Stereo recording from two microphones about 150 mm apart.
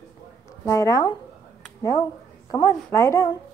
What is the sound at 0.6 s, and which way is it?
A woman's voice, 20° left (ahead or behind).